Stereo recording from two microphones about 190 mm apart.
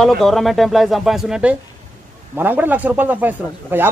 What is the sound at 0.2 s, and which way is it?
A man's voice, centre (ahead or behind).